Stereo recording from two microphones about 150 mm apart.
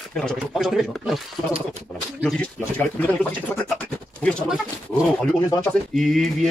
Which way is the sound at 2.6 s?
10° left (ahead or behind).